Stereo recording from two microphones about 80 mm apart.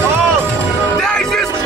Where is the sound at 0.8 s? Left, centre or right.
Centre.